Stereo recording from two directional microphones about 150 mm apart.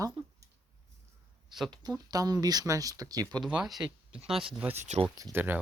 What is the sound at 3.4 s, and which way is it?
Speech, 5° right (ahead or behind).